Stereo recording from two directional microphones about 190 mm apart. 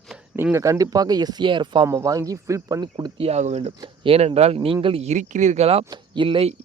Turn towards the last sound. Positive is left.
turn(degrees=-30)  # may be behind; listen again after turning